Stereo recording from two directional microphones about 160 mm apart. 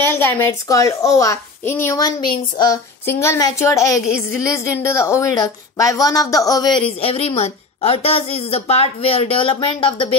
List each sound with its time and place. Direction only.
0.2 s a woman's voice: 15° left (ahead or behind)
7.0 s a woman's voice: 35° left (ahead or behind)